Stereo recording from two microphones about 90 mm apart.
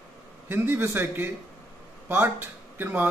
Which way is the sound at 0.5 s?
25° right (ahead or behind).